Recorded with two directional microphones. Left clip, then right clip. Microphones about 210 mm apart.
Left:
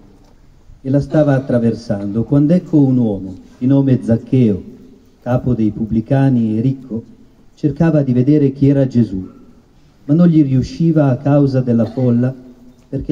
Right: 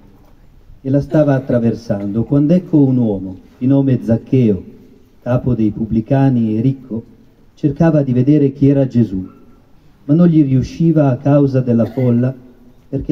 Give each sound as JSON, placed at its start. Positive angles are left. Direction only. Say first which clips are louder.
{"t": 0.8, "sound": "a man's voice", "louder": "even", "side_deg": -5}